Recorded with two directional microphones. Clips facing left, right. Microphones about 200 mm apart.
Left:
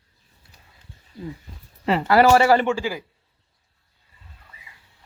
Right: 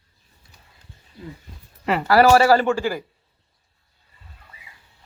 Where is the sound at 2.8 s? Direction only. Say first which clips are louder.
Right 3 dB; 50° right (ahead or behind).